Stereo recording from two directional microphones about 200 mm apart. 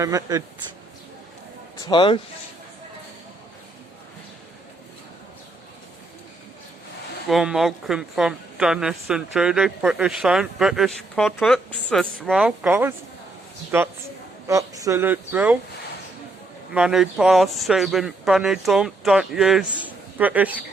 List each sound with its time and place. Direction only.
0.0 s speech: 15° right (ahead or behind)
1.9 s speech: 25° left (ahead or behind)
7.3 s a woman's voice: centre (ahead or behind)
16.7 s a woman's voice: 5° right (ahead or behind)